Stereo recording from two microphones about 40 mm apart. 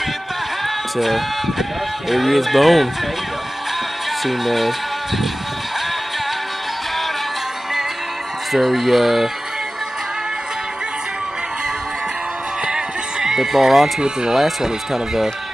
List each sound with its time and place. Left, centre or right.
0.9 s speech: centre
4.2 s speech: centre
8.5 s speech: centre
12.6 s music: centre
13.9 s speech: centre